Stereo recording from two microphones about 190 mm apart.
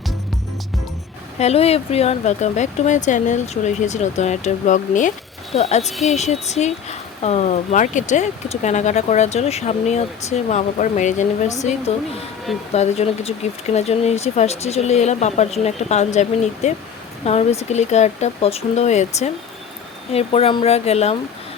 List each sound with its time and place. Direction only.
1.4 s speech: 35° left (ahead or behind)
5.8 s speech: centre (ahead or behind)
6.1 s speech: 35° left (ahead or behind)